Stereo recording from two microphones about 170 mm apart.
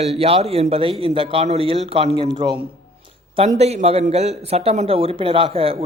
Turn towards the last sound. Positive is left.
turn(degrees=-35)  # may be behind; listen again after turning